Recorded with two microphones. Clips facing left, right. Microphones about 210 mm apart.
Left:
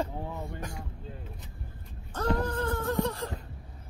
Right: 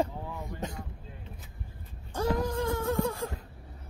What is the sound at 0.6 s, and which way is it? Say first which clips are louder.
Speech: right 3 dB; 25° right (ahead or behind).